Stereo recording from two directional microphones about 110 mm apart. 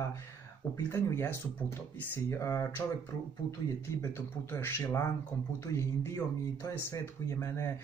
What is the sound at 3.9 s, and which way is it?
Speech, 25° left (ahead or behind).